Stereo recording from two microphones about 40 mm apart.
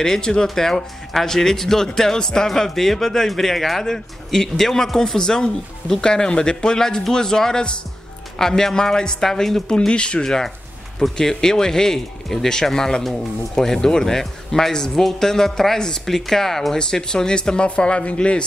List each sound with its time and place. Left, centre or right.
0.0 s speech: centre
9.8 s speech: left